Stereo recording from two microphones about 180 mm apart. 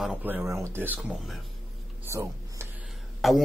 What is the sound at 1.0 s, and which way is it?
Speech, centre (ahead or behind).